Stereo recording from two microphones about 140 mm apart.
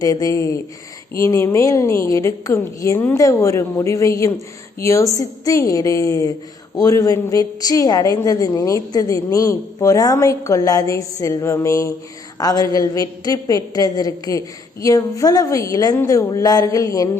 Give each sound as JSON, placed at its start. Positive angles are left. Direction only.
{"t": 0.0, "sound": "a woman's voice", "side_deg": 25}